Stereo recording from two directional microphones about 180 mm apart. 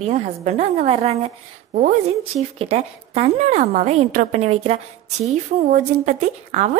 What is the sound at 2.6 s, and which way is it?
A woman's voice, 35° right (ahead or behind).